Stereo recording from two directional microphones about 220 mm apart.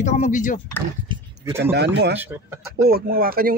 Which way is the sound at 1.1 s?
20° right (ahead or behind).